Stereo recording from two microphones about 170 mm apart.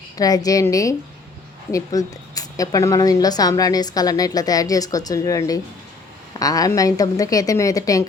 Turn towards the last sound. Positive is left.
turn(degrees=20)  # may be behind; listen again after turning